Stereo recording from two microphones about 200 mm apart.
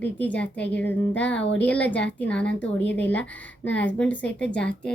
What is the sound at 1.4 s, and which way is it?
Speech, 65° left (ahead or behind).